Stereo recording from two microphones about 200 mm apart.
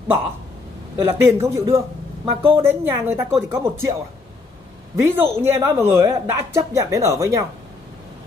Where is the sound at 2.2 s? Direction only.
25° right (ahead or behind).